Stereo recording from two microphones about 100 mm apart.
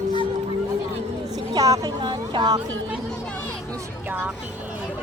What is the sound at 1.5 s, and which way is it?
Speech, 35° right (ahead or behind).